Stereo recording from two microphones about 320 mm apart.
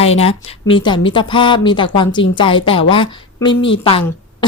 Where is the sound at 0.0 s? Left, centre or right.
Centre.